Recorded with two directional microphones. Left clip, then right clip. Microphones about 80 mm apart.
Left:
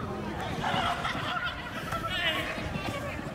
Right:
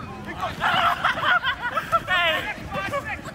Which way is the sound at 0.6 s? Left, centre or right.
Right.